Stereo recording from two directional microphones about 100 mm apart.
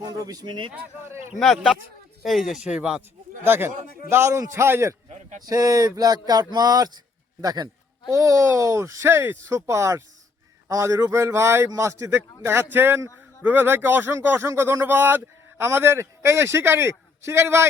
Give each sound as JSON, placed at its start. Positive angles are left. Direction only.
{"t": 0.0, "sound": "speech", "side_deg": -40}
{"t": 1.4, "sound": "speech", "side_deg": 0}
{"t": 3.4, "sound": "speech", "side_deg": -20}
{"t": 5.4, "sound": "speech", "side_deg": -40}